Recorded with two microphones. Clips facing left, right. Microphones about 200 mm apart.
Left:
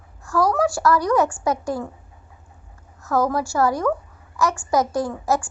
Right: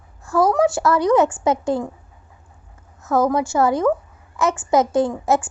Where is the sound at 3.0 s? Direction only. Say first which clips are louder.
Right 3 dB; 20° right (ahead or behind).